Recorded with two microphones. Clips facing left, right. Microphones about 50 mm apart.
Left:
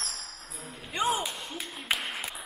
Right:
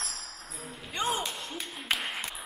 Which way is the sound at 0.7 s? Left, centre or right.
Centre.